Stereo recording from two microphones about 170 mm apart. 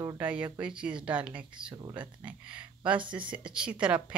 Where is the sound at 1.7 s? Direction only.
25° right (ahead or behind).